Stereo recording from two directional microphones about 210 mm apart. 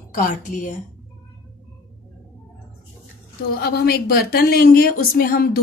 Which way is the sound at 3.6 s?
50° left (ahead or behind).